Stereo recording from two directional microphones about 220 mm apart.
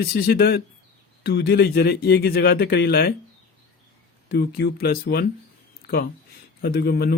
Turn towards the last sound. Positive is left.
turn(degrees=45)  # may be behind; listen again after turning